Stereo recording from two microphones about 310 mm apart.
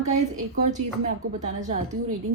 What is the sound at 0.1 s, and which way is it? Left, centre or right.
A woman's voice, right.